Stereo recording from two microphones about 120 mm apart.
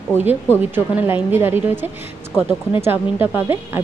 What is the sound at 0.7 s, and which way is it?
A woman's voice, 15° right (ahead or behind).